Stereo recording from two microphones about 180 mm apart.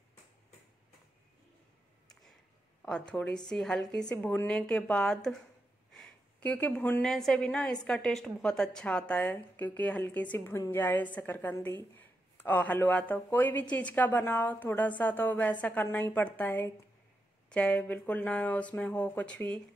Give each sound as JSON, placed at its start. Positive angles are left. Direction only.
{"t": 2.8, "sound": "a woman's voice", "side_deg": 5}